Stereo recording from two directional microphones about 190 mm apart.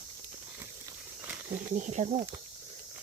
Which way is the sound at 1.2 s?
10° right (ahead or behind).